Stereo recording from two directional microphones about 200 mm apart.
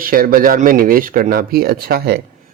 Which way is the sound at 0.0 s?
45° right (ahead or behind).